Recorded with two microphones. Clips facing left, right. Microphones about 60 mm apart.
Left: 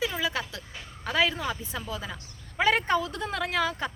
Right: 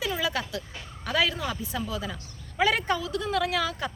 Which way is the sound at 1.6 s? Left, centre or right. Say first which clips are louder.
Right 3 dB; left.